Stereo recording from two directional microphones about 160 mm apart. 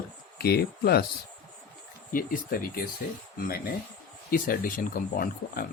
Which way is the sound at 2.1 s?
65° left (ahead or behind).